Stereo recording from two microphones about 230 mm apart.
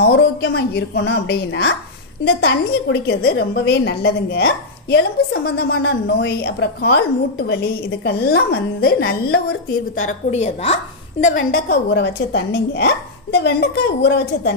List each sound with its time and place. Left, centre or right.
0.0 s a woman's voice: left
10.0 s a woman's voice: left